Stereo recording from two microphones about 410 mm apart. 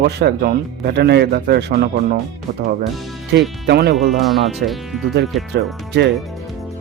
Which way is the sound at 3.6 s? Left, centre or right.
Right.